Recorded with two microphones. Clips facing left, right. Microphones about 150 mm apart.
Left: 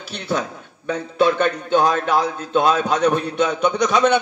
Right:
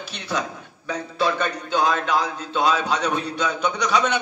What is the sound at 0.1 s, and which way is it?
A man's voice, 50° left (ahead or behind).